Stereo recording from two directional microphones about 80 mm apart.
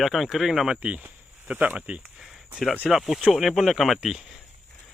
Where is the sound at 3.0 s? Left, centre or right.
Centre.